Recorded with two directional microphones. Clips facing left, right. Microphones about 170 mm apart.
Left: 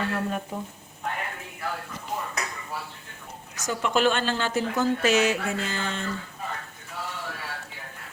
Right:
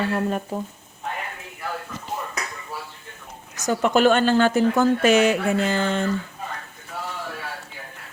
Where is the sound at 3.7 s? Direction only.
50° right (ahead or behind).